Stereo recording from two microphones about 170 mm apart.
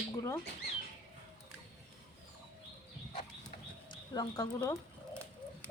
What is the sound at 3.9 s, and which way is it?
Speech, 20° left (ahead or behind).